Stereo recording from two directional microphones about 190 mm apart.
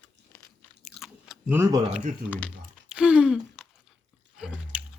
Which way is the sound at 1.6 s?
20° right (ahead or behind).